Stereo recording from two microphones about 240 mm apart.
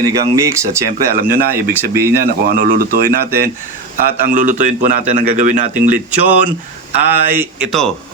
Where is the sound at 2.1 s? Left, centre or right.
Right.